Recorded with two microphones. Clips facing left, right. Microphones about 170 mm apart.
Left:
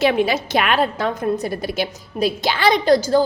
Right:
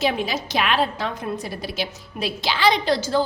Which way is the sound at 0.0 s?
60° left (ahead or behind).